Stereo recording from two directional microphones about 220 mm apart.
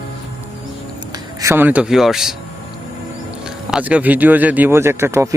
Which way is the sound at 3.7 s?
5° right (ahead or behind).